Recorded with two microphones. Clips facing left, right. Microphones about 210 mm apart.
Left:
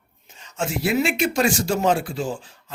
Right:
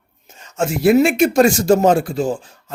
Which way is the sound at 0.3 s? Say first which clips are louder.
Right 7 dB; 45° right (ahead or behind).